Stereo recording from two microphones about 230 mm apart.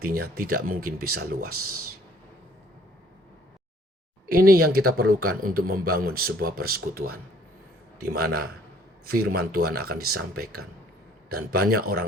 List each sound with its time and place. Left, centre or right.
0.0 s speech: right
4.3 s speech: right